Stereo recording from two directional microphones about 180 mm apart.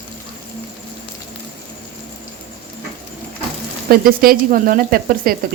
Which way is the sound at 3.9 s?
55° right (ahead or behind).